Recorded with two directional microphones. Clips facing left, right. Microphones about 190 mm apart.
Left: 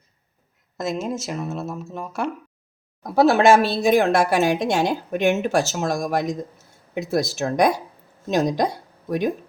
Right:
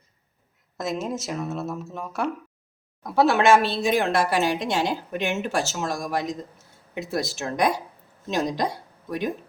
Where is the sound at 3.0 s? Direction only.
40° left (ahead or behind).